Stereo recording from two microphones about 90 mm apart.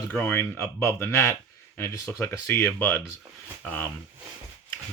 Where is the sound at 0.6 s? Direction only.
35° left (ahead or behind).